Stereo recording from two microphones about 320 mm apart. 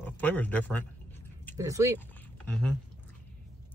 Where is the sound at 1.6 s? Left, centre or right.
Centre.